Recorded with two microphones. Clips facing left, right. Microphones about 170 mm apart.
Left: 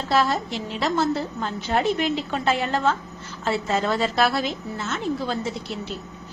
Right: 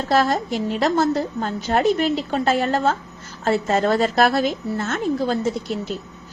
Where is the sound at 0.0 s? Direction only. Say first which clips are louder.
Right 3 dB; 45° right (ahead or behind).